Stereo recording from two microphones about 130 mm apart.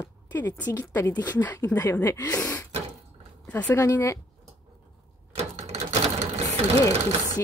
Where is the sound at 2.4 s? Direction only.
15° left (ahead or behind).